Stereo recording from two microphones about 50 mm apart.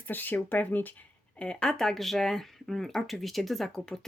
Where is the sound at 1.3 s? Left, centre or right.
Centre.